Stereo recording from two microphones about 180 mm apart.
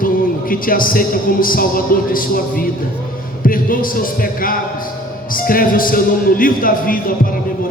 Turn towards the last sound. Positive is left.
turn(degrees=50)  # may be behind; listen again after turning